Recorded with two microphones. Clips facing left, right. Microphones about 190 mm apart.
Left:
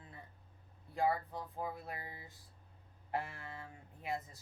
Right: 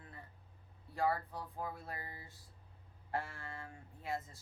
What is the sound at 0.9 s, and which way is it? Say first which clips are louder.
Speech: left 1 dB; 15° left (ahead or behind).